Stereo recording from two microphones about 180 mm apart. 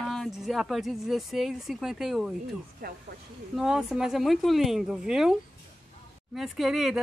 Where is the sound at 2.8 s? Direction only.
50° right (ahead or behind).